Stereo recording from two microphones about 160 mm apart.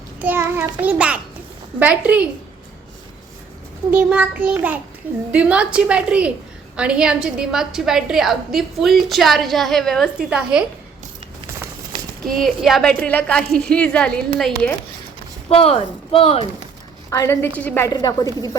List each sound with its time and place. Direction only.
0.2 s a child's voice: 10° right (ahead or behind)
3.9 s a woman's voice: 10° right (ahead or behind)
12.2 s a woman's voice: centre (ahead or behind)
15.4 s speech: 40° left (ahead or behind)
17.1 s a woman's voice: 15° left (ahead or behind)
17.9 s a woman's voice: 25° left (ahead or behind)